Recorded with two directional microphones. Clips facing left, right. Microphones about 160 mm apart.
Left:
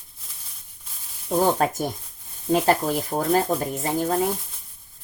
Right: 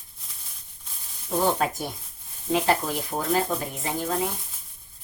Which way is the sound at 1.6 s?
45° left (ahead or behind).